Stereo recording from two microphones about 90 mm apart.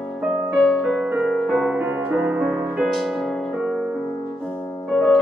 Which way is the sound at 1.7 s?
20° right (ahead or behind).